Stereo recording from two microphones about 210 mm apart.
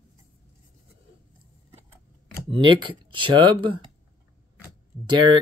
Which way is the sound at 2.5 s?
25° right (ahead or behind).